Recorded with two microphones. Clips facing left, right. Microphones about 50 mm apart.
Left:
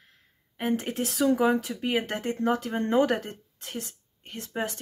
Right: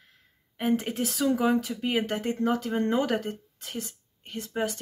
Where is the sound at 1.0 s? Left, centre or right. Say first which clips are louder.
Left 3 dB; centre.